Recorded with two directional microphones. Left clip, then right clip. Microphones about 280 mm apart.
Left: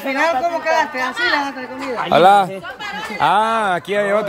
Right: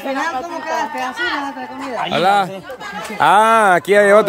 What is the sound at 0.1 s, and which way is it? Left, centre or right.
Speech, centre.